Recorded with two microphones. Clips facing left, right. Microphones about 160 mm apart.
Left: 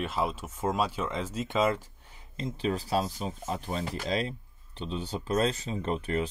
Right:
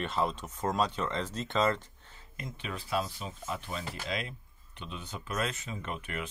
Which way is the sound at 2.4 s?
30° left (ahead or behind).